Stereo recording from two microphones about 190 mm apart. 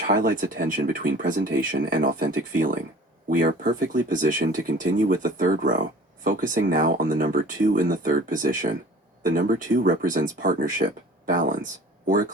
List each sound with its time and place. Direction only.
0.1 s speech: 50° right (ahead or behind)